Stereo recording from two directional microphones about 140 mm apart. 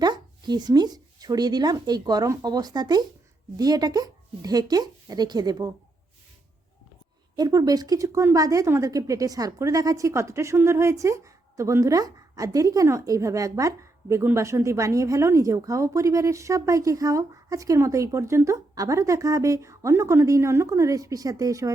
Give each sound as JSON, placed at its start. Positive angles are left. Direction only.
{"t": 0.0, "sound": "a woman's voice", "side_deg": -30}
{"t": 7.3, "sound": "a woman's voice", "side_deg": -25}